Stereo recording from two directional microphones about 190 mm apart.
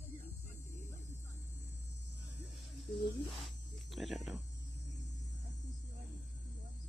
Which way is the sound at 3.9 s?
Centre (ahead or behind).